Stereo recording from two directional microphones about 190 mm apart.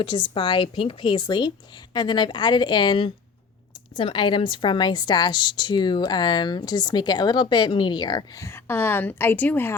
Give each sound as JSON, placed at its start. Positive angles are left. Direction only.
{"t": 0.0, "sound": "a woman's voice", "side_deg": 25}